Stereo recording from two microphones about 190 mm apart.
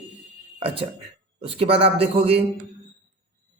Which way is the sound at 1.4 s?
30° right (ahead or behind).